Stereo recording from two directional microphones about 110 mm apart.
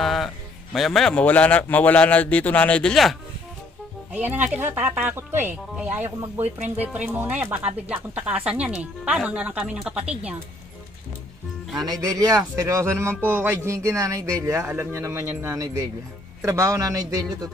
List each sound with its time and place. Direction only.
0.0 s music: centre (ahead or behind)
0.7 s a man's voice: centre (ahead or behind)
4.1 s speech: 15° right (ahead or behind)
11.7 s speech: 35° right (ahead or behind)